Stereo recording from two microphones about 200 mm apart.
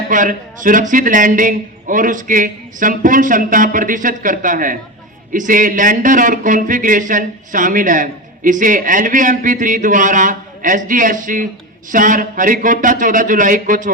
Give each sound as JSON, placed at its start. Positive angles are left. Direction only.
{"t": 0.1, "sound": "speech", "side_deg": -40}